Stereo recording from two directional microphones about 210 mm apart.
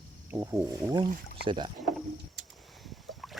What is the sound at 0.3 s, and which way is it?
Speech, 15° right (ahead or behind).